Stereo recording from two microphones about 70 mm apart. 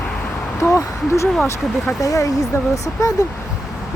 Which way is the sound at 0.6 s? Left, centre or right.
Left.